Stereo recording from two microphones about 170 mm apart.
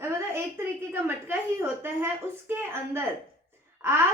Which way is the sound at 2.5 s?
15° right (ahead or behind).